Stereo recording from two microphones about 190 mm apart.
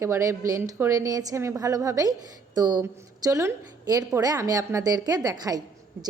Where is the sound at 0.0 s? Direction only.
15° right (ahead or behind).